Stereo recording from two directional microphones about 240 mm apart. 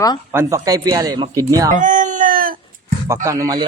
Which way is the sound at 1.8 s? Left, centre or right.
Right.